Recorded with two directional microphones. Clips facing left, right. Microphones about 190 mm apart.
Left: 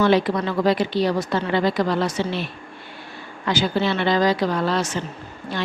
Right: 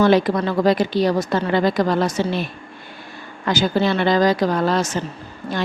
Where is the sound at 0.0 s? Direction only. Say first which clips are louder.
Right 3 dB; 45° right (ahead or behind).